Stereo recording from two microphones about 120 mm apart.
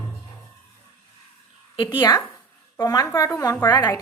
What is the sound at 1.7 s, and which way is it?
A woman's voice, 45° left (ahead or behind).